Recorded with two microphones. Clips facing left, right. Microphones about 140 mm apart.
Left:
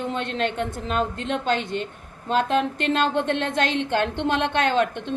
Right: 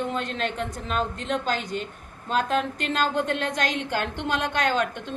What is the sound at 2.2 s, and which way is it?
A woman's voice, 30° left (ahead or behind).